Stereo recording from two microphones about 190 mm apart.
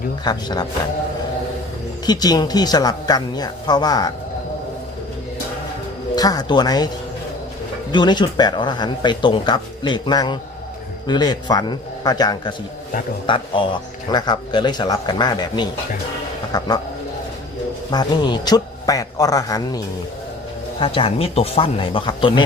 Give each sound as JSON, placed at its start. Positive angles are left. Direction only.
{"t": 0.3, "sound": "speech", "side_deg": 20}
{"t": 2.0, "sound": "speech", "side_deg": 20}
{"t": 6.1, "sound": "speech", "side_deg": 20}
{"t": 7.9, "sound": "speech", "side_deg": 25}
{"t": 17.9, "sound": "speech", "side_deg": 25}